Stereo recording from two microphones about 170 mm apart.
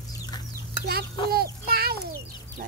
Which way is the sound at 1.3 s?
65° right (ahead or behind).